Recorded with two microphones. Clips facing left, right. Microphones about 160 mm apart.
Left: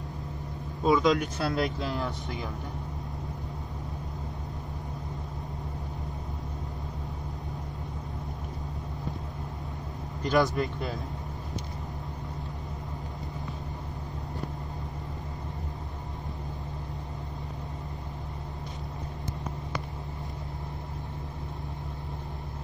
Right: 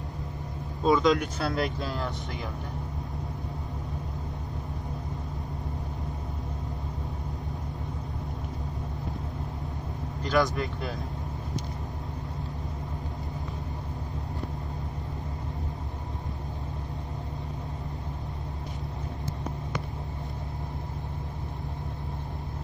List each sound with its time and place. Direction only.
0.8 s speech: centre (ahead or behind)
10.2 s speech: 20° left (ahead or behind)